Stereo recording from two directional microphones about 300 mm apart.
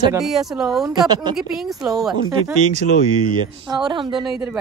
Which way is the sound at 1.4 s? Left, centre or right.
Centre.